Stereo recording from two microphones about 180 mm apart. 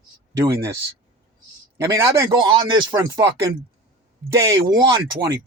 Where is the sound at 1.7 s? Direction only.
15° right (ahead or behind).